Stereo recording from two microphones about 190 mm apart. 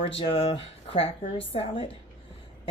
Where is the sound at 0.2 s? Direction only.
30° left (ahead or behind).